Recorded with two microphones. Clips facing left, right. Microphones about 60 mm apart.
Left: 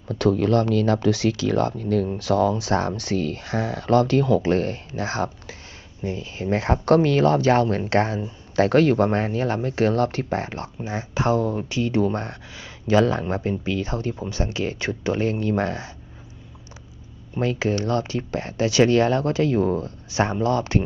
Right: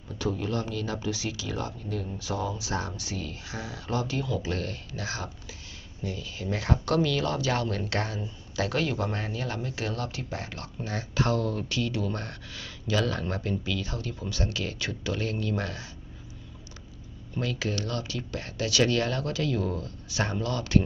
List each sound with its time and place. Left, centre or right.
0.1 s speech: left
6.0 s speech: left
8.5 s speech: left
10.8 s speech: left
17.3 s speech: left